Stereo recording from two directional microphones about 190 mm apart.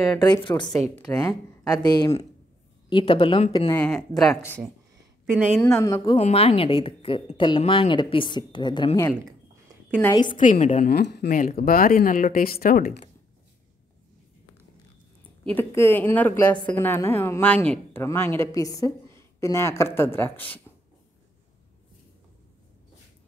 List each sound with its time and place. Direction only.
0.2 s a woman's voice: 25° left (ahead or behind)
3.7 s speech: 5° left (ahead or behind)
5.2 s a woman's voice: 10° right (ahead or behind)
5.8 s a woman's voice: 20° left (ahead or behind)
10.3 s speech: 40° left (ahead or behind)
11.0 s speech: 60° left (ahead or behind)
15.4 s speech: 10° left (ahead or behind)